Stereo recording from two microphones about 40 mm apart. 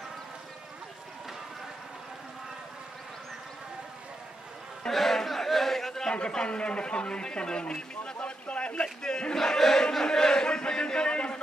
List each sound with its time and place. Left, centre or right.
4.8 s a sound: centre
6.0 s a man's voice: left
8.8 s crowd: centre